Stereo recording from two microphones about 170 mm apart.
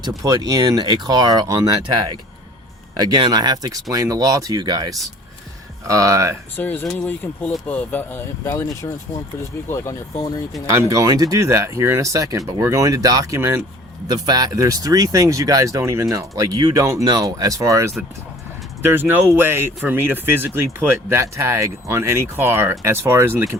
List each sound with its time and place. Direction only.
0.2 s speech: 20° right (ahead or behind)
6.6 s speech: 10° left (ahead or behind)
10.7 s speech: 15° right (ahead or behind)